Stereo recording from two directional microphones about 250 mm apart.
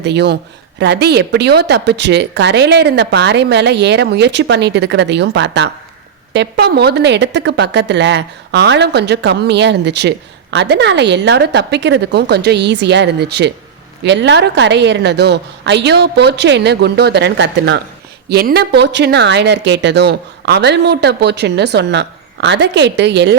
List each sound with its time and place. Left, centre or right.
0.0 s speech: right